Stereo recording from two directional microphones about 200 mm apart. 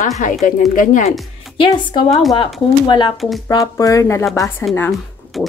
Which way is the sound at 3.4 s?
15° left (ahead or behind).